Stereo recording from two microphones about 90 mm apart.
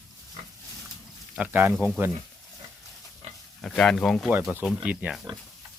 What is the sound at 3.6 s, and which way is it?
Speech, 5° left (ahead or behind).